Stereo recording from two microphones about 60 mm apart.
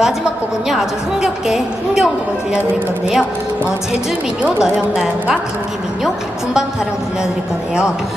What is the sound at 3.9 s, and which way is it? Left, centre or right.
Speech, right.